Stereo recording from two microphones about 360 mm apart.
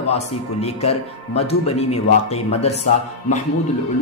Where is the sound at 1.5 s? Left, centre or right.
Centre.